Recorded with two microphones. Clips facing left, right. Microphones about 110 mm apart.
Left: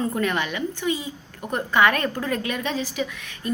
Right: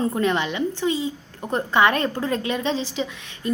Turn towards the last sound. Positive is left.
turn(degrees=-25)  # may be behind; listen again after turning